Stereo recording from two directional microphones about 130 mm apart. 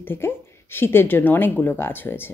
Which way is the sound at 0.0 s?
15° left (ahead or behind).